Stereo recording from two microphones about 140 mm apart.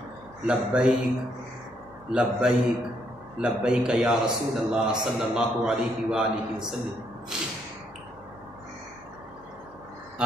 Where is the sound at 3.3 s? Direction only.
5° right (ahead or behind).